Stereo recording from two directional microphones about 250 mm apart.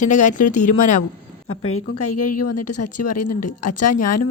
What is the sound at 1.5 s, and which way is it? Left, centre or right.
A woman's voice, left.